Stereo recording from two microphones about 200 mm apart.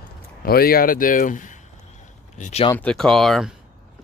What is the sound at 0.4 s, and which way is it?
A man's voice, 50° left (ahead or behind).